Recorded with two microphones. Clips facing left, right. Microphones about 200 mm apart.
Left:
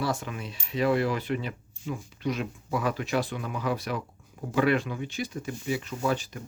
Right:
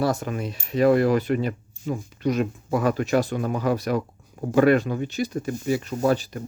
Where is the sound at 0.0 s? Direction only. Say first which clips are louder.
Right 7 dB; 45° right (ahead or behind).